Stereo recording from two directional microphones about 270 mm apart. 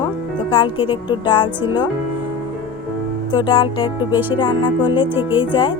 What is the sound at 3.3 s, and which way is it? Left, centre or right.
A woman's voice, centre.